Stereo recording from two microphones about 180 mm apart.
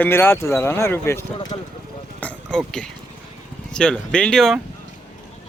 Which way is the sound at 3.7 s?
5° left (ahead or behind).